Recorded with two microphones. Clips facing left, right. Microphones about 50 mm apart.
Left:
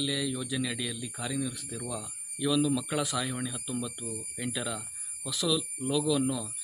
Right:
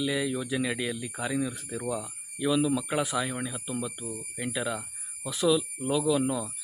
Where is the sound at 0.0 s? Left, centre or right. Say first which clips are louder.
Right 3 dB; right.